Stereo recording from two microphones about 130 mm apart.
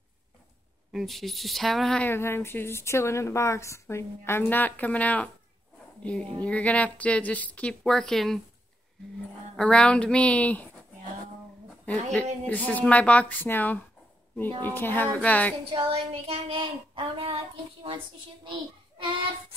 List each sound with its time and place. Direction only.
0.9 s speech: centre (ahead or behind)
2.0 s a woman's voice: 20° left (ahead or behind)
6.4 s a woman's voice: 10° left (ahead or behind)
9.6 s a woman's voice: 10° left (ahead or behind)
12.1 s a woman's voice: 10° left (ahead or behind)
15.7 s speech: 45° right (ahead or behind)